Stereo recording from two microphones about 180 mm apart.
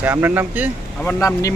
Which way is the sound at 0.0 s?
10° right (ahead or behind).